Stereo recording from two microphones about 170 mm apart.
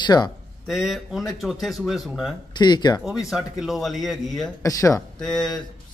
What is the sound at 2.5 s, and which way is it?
Speech, 25° left (ahead or behind).